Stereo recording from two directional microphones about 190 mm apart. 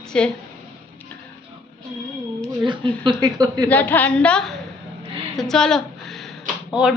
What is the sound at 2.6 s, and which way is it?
Speech, 25° right (ahead or behind).